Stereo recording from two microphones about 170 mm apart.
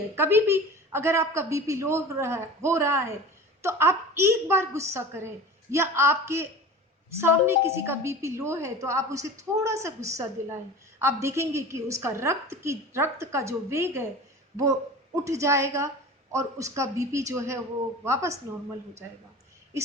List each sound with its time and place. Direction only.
0.2 s a woman's voice: 15° right (ahead or behind)
15.1 s a woman's voice: 15° right (ahead or behind)